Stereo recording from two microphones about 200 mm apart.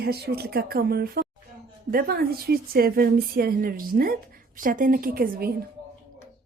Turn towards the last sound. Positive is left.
turn(degrees=-50)  # may be behind; listen again after turning